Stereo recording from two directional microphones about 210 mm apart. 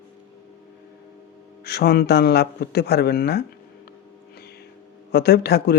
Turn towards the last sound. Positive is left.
turn(degrees=50)  # may be behind; listen again after turning